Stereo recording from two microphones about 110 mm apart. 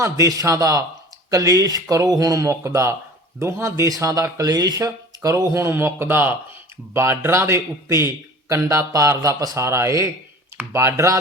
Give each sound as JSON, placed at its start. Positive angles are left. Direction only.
{"t": 0.0, "sound": "speech", "side_deg": -30}